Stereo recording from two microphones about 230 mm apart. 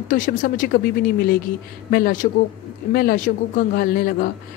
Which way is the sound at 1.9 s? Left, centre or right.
Left.